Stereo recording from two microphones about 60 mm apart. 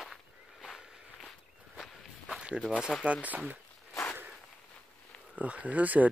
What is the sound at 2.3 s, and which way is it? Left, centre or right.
Walk, centre.